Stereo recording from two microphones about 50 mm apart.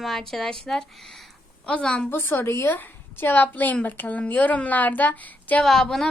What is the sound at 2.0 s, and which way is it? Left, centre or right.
Speech, left.